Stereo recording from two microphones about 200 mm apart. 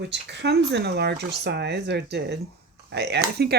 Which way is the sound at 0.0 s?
60° right (ahead or behind).